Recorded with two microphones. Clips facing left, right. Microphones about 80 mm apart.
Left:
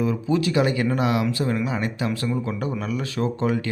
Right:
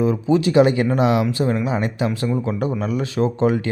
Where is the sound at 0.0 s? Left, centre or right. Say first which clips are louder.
Right 5 dB; right.